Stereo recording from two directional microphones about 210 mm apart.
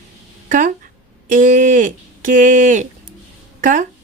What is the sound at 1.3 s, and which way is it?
Speech, 40° right (ahead or behind).